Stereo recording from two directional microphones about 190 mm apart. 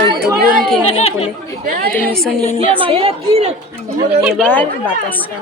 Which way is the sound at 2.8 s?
30° right (ahead or behind).